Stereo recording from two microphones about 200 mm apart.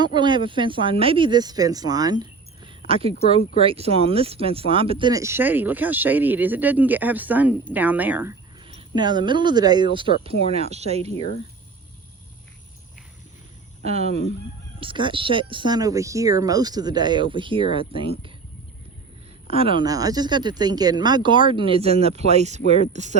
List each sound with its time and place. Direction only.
0.0 s speech: 20° right (ahead or behind)
2.6 s a sound: 30° right (ahead or behind)
3.2 s speech: 30° right (ahead or behind); by 8.4 s 10° right (ahead or behind)
9.0 s speech: 20° right (ahead or behind)
13.8 s speech: 30° right (ahead or behind)
19.5 s speech: 30° right (ahead or behind)